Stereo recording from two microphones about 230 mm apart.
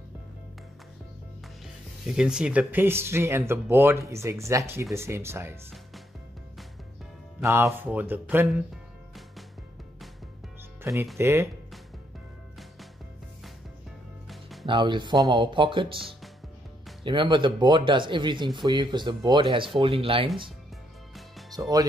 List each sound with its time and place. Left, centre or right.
2.0 s speech: centre
7.3 s speech: centre
10.8 s music: centre
11.1 s speech: centre
14.3 s music: centre
14.7 s speech: right
21.5 s speech: centre